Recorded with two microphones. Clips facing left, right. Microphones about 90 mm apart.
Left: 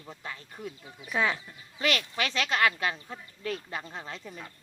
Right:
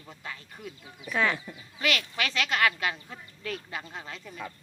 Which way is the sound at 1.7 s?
30° left (ahead or behind).